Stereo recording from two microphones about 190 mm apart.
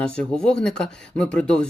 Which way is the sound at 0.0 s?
5° left (ahead or behind).